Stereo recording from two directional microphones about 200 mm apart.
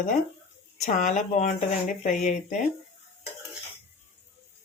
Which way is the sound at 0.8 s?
35° left (ahead or behind).